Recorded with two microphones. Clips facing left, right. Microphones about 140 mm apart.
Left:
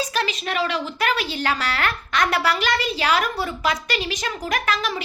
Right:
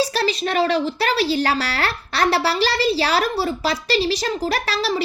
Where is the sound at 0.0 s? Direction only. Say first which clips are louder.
Right 5 dB; 35° right (ahead or behind).